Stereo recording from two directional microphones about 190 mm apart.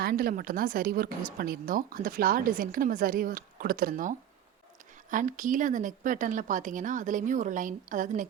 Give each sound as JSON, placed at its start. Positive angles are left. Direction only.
{"t": 0.0, "sound": "speech", "side_deg": -50}
{"t": 5.1, "sound": "speech", "side_deg": -45}